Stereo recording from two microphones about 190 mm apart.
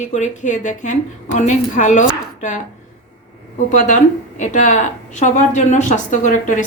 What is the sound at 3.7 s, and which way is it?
Speech, 40° left (ahead or behind).